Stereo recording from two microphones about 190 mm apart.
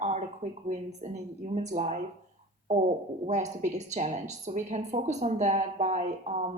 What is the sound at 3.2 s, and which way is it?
A woman's voice, 35° right (ahead or behind).